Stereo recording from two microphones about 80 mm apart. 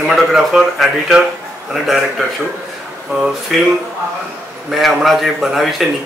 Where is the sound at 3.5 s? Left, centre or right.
Centre.